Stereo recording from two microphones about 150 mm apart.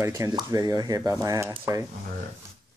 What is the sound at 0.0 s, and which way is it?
Speech, 20° right (ahead or behind).